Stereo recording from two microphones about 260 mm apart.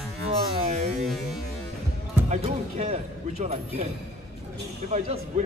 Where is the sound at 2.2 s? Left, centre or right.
Right.